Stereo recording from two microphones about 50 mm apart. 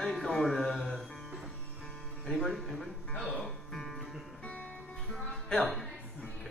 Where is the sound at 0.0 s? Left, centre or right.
Centre.